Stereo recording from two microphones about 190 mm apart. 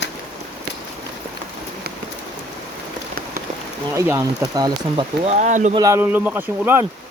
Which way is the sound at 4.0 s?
15° right (ahead or behind).